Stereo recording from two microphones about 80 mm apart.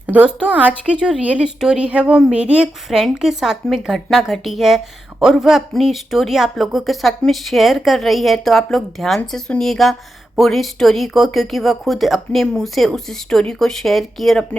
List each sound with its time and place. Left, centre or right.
0.1 s a woman's voice: centre